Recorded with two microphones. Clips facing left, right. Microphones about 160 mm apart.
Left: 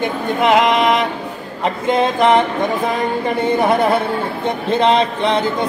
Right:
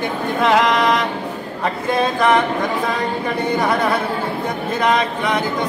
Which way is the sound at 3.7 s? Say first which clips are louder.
Left 3 dB; 25° left (ahead or behind).